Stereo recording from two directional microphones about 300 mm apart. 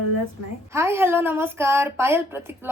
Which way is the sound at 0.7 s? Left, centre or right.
Centre.